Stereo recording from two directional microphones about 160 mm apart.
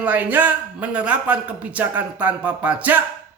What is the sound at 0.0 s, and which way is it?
Speech, 10° right (ahead or behind).